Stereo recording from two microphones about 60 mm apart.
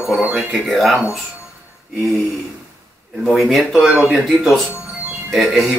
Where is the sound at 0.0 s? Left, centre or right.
Centre.